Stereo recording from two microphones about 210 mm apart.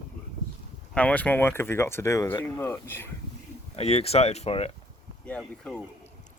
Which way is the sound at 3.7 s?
30° left (ahead or behind).